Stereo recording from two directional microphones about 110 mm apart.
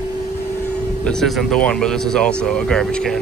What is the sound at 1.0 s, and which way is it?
Speech, 5° left (ahead or behind).